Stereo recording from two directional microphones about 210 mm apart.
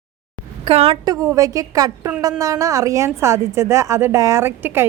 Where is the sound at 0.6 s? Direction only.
25° right (ahead or behind).